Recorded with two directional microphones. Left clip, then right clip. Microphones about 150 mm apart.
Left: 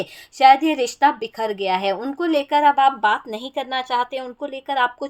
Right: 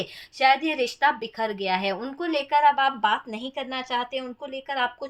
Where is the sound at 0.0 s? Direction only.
50° left (ahead or behind).